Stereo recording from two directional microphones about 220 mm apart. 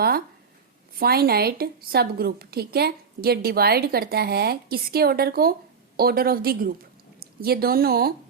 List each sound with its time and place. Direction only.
0.9 s a woman's voice: 45° right (ahead or behind)